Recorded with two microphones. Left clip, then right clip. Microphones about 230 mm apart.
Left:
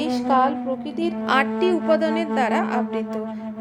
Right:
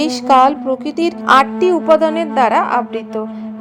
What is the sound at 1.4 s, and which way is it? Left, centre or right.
A woman's voice, centre.